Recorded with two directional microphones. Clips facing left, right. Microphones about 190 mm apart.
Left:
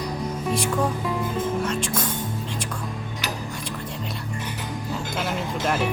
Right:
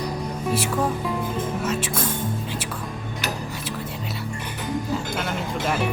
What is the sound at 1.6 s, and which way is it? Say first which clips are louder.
Music: right 1 dB; 5° right (ahead or behind).